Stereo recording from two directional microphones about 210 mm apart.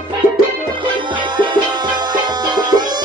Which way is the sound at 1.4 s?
20° right (ahead or behind).